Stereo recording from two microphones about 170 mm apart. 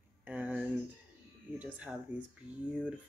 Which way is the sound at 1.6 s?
10° right (ahead or behind).